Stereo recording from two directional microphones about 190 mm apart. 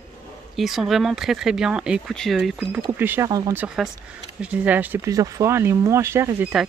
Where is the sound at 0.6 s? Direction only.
Centre (ahead or behind); by 3.6 s 20° right (ahead or behind).